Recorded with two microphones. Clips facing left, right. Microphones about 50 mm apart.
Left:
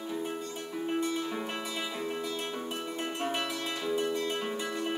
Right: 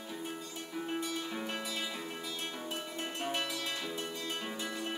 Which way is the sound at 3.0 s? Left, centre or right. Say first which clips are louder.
Left 4 dB; centre.